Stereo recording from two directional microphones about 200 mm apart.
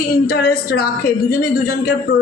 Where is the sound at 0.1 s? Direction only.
50° left (ahead or behind).